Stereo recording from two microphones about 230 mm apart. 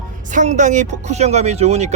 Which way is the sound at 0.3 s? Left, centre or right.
Right.